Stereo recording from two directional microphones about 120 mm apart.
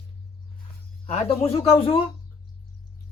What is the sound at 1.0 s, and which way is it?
Speech, 60° left (ahead or behind).